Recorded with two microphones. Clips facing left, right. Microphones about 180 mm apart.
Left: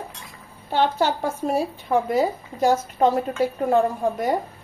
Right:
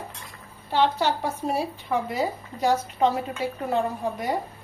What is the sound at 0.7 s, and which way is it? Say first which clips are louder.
A woman's voice: left 2 dB; 50° left (ahead or behind).